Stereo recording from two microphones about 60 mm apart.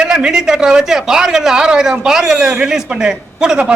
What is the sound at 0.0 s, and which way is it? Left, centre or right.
A man's voice, centre.